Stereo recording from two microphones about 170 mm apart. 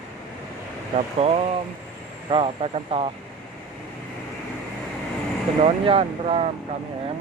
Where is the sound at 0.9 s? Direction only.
35° right (ahead or behind).